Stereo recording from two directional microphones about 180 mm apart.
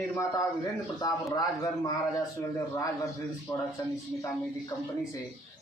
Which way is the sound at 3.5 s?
10° left (ahead or behind).